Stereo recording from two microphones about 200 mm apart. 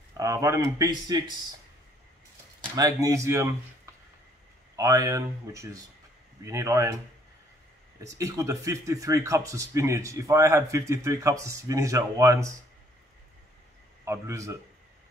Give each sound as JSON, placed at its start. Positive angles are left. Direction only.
{"t": 0.2, "sound": "speech", "side_deg": -15}
{"t": 2.7, "sound": "speech", "side_deg": -15}
{"t": 4.7, "sound": "speech", "side_deg": -15}
{"t": 8.0, "sound": "speech", "side_deg": -15}
{"t": 14.0, "sound": "speech", "side_deg": -15}